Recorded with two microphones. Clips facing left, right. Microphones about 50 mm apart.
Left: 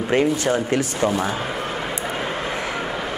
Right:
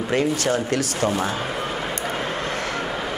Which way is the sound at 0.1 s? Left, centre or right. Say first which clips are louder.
Left 2 dB; centre.